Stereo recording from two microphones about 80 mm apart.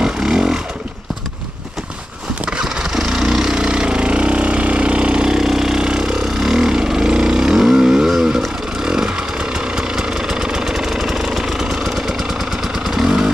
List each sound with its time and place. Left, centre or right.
0.0 s vehicle: centre
2.5 s vehicle: centre
8.8 s chainsaw: centre
9.8 s vehicle: centre
12.8 s motorcycle: centre